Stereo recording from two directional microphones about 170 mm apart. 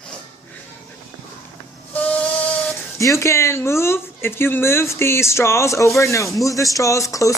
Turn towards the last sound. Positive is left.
turn(degrees=20)  # may be behind; listen again after turning